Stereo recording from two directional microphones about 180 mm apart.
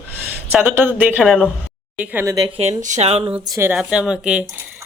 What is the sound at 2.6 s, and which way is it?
Speech, 40° right (ahead or behind).